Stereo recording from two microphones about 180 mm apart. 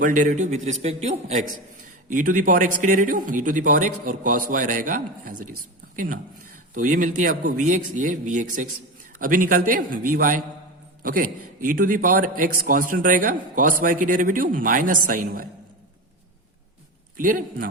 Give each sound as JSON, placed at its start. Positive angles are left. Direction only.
{"t": 0.0, "sound": "a man's voice", "side_deg": -45}
{"t": 6.7, "sound": "a man's voice", "side_deg": -45}
{"t": 17.2, "sound": "a man's voice", "side_deg": -50}